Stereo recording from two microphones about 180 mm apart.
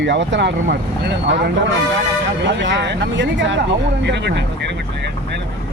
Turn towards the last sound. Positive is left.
turn(degrees=-75)  # may be behind; listen again after turning